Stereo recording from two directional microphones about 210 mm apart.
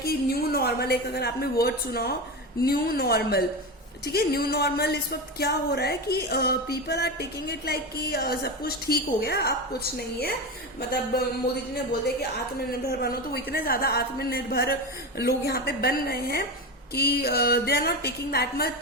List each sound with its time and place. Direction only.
0.0 s a woman's voice: 45° left (ahead or behind)
2.6 s music: 45° left (ahead or behind)
10.8 s music: 50° left (ahead or behind)
12.9 s music: 50° left (ahead or behind)